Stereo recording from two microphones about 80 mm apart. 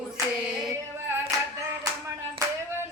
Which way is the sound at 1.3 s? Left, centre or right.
Right.